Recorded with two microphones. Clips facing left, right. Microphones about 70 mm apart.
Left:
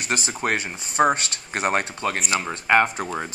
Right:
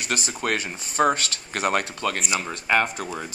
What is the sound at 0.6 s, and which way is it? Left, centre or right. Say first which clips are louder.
Speech: left 3 dB; centre.